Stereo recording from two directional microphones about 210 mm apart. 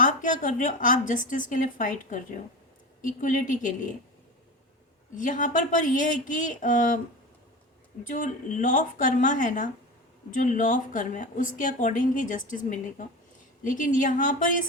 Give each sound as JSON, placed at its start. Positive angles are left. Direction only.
{"t": 0.0, "sound": "speech", "side_deg": 35}
{"t": 5.1, "sound": "speech", "side_deg": 40}
{"t": 8.0, "sound": "speech", "side_deg": 35}